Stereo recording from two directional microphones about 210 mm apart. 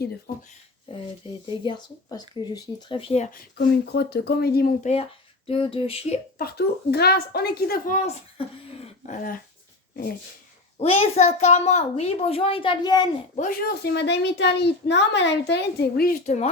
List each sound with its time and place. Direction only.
0.3 s speech: 45° left (ahead or behind)
0.9 s a child's voice: 25° left (ahead or behind)
3.9 s a child's voice: 50° left (ahead or behind); by 6.1 s 30° left (ahead or behind)
6.4 s speech: 50° left (ahead or behind)
10.8 s a child's voice: 30° left (ahead or behind)
13.3 s a child's voice: 40° left (ahead or behind)